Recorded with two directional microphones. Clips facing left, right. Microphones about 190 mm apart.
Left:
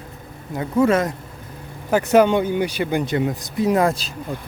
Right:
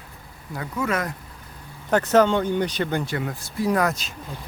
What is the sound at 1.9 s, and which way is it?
Speech, 10° left (ahead or behind).